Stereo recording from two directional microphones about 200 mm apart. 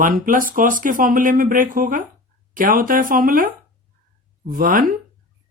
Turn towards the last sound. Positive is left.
turn(degrees=-45)  # may be behind; listen again after turning